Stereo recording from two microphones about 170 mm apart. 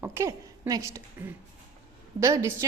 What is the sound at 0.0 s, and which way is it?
A woman's voice, 15° right (ahead or behind).